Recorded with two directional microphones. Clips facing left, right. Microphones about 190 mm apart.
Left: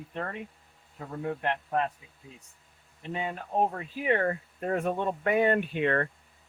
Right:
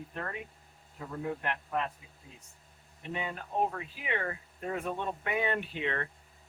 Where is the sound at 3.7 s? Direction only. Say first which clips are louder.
Left 8 dB; 45° left (ahead or behind).